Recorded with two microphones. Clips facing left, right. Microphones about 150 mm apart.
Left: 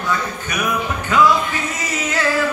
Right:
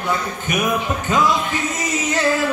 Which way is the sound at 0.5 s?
20° right (ahead or behind).